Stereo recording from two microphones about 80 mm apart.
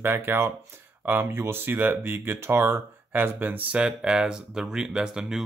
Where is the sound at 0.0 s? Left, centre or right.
Right.